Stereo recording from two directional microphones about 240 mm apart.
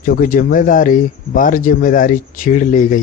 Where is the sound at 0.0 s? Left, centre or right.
Left.